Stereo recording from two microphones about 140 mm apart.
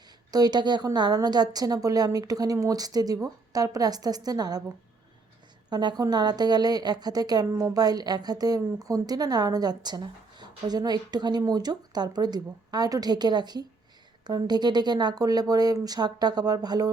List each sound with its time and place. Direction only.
0.3 s a woman's voice: 30° right (ahead or behind)
5.7 s a woman's voice: 30° right (ahead or behind)